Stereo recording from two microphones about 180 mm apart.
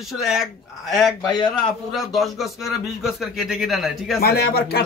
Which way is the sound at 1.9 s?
Centre (ahead or behind).